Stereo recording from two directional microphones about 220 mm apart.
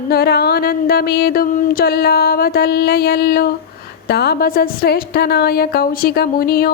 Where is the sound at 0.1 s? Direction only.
45° left (ahead or behind).